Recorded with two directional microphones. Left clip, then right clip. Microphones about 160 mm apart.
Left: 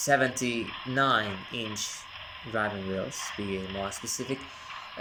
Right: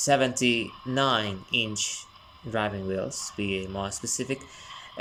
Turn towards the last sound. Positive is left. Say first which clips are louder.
# right 2 dB
turn(degrees=-5)  # may be behind; listen again after turning